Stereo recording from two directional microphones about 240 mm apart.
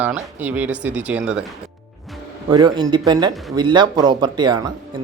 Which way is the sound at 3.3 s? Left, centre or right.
Centre.